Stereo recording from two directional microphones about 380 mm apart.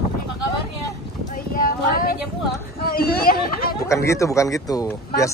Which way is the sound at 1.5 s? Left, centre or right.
Left.